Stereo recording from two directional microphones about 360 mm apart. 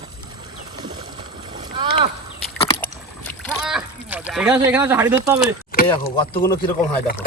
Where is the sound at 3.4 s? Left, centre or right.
Centre.